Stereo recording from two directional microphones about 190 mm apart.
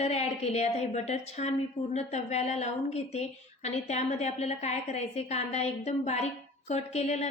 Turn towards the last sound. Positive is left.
turn(degrees=35)  # may be behind; listen again after turning